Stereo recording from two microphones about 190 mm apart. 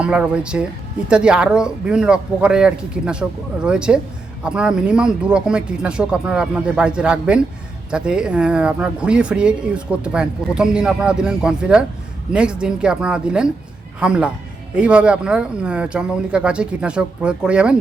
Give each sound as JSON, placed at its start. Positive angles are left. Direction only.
{"t": 0.0, "sound": "speech", "side_deg": -5}